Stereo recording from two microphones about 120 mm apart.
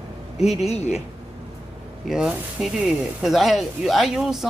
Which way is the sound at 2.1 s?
5° right (ahead or behind).